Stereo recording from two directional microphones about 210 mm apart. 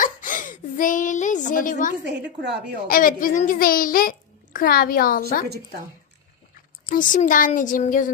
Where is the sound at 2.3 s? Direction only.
55° right (ahead or behind).